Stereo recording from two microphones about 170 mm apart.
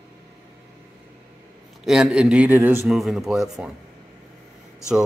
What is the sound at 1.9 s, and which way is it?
Speech, 5° right (ahead or behind).